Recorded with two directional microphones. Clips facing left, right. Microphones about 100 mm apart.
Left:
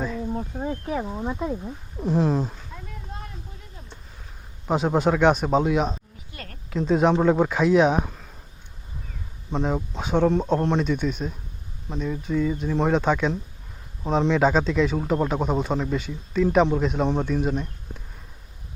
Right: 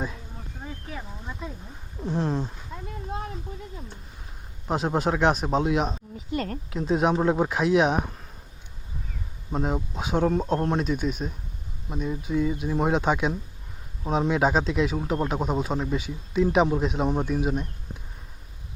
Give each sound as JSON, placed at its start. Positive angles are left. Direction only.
{"t": 0.6, "sound": "speech", "side_deg": 45}
{"t": 2.0, "sound": "speech", "side_deg": 0}
{"t": 4.7, "sound": "speech", "side_deg": 0}
{"t": 9.5, "sound": "speech", "side_deg": -5}
{"t": 11.9, "sound": "a man's voice", "side_deg": -15}